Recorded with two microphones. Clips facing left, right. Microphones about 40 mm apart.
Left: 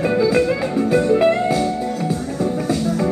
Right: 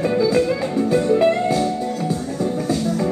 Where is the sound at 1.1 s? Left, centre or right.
Left.